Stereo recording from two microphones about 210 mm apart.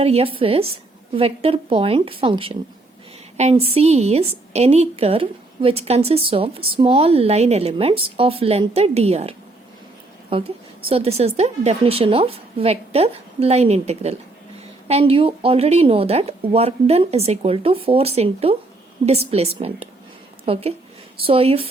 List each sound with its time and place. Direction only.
0.0 s a woman's voice: 30° right (ahead or behind)